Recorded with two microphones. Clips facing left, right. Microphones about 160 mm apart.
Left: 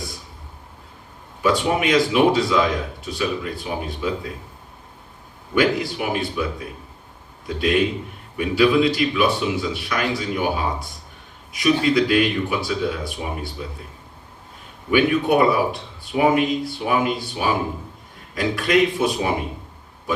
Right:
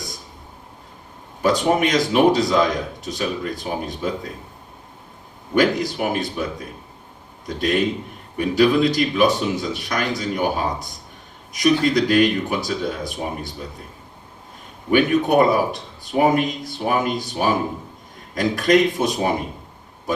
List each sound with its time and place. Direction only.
1.4 s speech: 40° right (ahead or behind)
5.5 s speech: 40° right (ahead or behind)
14.8 s a man's voice: 45° right (ahead or behind)